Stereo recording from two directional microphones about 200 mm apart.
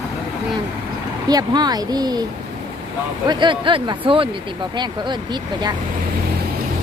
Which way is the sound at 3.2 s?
25° right (ahead or behind).